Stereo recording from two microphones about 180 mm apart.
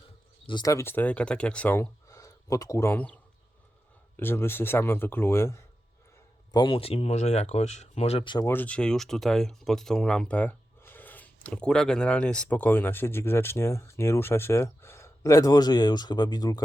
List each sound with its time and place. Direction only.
0.4 s speech: 20° left (ahead or behind)
4.2 s speech: 10° left (ahead or behind)
6.5 s speech: 25° left (ahead or behind)
8.4 s speech: 10° left (ahead or behind)